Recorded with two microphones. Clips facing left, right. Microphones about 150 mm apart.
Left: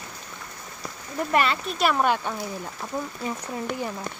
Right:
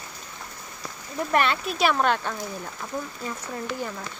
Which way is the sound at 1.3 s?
Centre (ahead or behind).